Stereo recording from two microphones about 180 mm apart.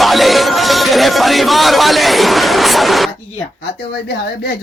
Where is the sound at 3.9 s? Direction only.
70° left (ahead or behind).